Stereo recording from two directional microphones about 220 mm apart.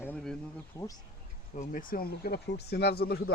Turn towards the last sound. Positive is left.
turn(degrees=45)  # may be behind; listen again after turning